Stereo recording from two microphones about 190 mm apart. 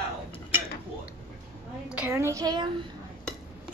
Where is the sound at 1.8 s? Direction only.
10° right (ahead or behind).